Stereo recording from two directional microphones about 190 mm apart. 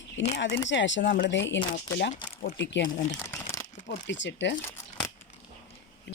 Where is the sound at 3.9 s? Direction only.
70° left (ahead or behind).